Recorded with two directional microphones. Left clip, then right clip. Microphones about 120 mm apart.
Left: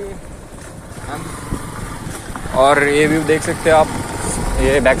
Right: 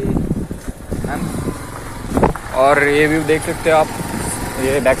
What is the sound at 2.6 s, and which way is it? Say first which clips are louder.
Speech: left 1 dB; 15° left (ahead or behind).